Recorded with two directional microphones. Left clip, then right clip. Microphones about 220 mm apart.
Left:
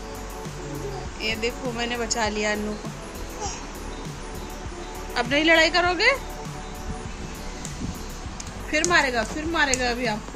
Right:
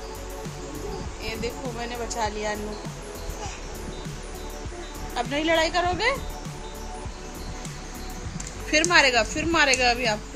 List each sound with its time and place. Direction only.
1.2 s speech: centre (ahead or behind)
5.1 s a woman's voice: 10° right (ahead or behind)
8.6 s speech: 45° right (ahead or behind)